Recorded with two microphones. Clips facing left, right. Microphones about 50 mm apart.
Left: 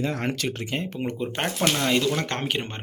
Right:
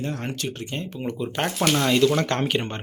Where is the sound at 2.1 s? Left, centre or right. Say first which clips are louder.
Right 4 dB; centre.